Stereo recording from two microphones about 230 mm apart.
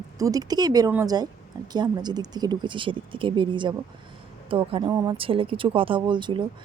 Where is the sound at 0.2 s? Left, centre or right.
Centre.